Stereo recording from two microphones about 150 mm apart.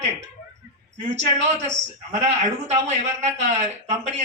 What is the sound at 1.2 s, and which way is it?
Speech, 50° right (ahead or behind).